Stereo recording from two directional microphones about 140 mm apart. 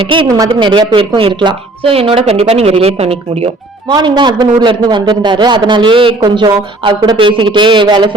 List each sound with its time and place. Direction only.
0.0 s a man's voice: 35° right (ahead or behind)
0.3 s a woman's voice: 25° right (ahead or behind); by 3.5 s 45° right (ahead or behind)
3.8 s a man's voice: 30° right (ahead or behind)